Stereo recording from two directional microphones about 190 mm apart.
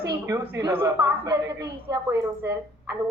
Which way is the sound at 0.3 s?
10° right (ahead or behind).